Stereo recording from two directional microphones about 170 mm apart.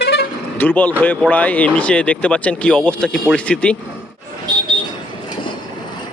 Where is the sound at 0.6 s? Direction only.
10° left (ahead or behind).